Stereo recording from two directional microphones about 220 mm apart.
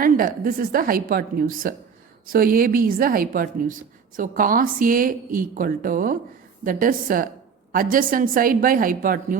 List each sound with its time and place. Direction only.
0.0 s a woman's voice: 40° right (ahead or behind)